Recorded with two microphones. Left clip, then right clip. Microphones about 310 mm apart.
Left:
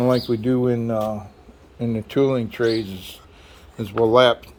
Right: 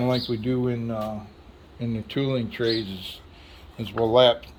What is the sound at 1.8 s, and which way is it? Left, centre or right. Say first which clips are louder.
Speech: left 8 dB; centre.